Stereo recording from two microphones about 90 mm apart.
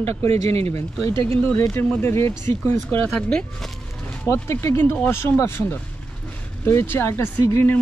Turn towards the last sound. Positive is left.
turn(degrees=30)  # may be behind; listen again after turning